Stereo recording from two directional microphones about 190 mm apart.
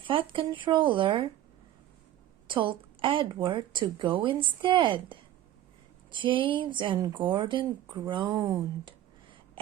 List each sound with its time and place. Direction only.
0.1 s speech: 25° right (ahead or behind)
2.5 s speech: 25° right (ahead or behind)